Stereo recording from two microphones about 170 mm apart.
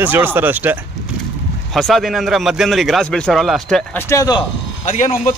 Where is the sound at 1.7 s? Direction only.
Centre (ahead or behind).